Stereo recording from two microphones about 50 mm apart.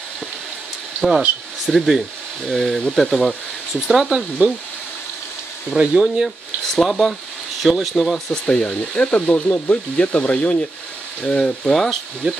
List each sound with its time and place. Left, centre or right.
1.7 s speech: centre
2.4 s speech: centre
3.1 s speech: centre
3.8 s speech: centre
4.4 s speech: right
5.8 s speech: centre
6.2 s speech: centre
8.3 s speech: centre
8.6 s speech: left; by 12.4 s centre